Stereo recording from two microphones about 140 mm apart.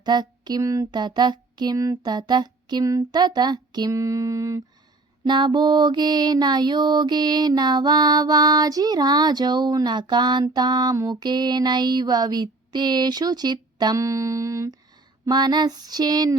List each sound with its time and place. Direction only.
0.0 s mantra: 30° right (ahead or behind)
5.2 s mantra: 35° right (ahead or behind)